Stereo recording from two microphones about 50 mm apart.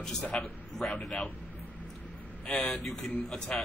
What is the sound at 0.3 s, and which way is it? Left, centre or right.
Speech, left.